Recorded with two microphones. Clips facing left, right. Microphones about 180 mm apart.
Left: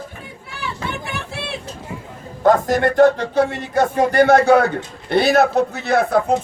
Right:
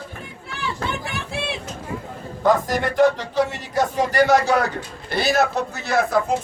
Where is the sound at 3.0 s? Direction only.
50° left (ahead or behind).